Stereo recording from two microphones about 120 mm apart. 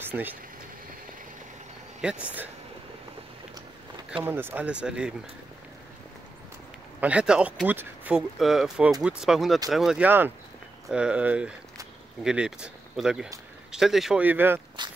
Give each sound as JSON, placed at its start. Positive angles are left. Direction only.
{"t": 0.0, "sound": "speech", "side_deg": -15}
{"t": 2.0, "sound": "speech", "side_deg": -10}
{"t": 4.2, "sound": "speech", "side_deg": -15}
{"t": 7.0, "sound": "speech", "side_deg": -10}
{"t": 8.4, "sound": "speech", "side_deg": -5}
{"t": 10.0, "sound": "speech", "side_deg": -15}
{"t": 14.2, "sound": "speech", "side_deg": -15}